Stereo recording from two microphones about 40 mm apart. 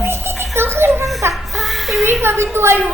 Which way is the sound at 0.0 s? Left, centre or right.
Right.